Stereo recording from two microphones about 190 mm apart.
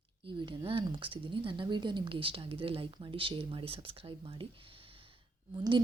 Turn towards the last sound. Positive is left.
turn(degrees=-25)  # may be behind; listen again after turning